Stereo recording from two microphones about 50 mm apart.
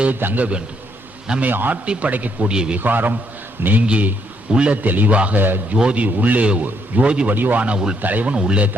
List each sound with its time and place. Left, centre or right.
0.1 s a man's voice: right
1.8 s speech: right
2.5 s a man's voice: centre
2.7 s a man's voice: right
4.8 s a man's voice: right
6.1 s a man's voice: right
7.6 s speech: right
8.0 s a man's voice: right
8.3 s speech: right